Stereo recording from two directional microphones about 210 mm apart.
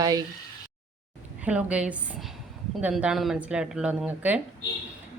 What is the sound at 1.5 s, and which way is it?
Speech, 5° right (ahead or behind).